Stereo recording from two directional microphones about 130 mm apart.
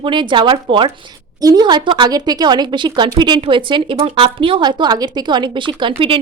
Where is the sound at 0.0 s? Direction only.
35° right (ahead or behind).